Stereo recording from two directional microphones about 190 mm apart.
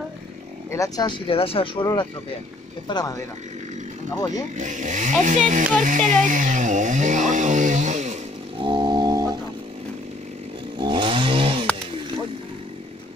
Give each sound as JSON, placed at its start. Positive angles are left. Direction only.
{"t": 0.7, "sound": "speech", "side_deg": 20}
{"t": 4.6, "sound": "speech", "side_deg": -40}
{"t": 8.6, "sound": "music", "side_deg": -25}
{"t": 10.8, "sound": "chainsaw", "side_deg": -25}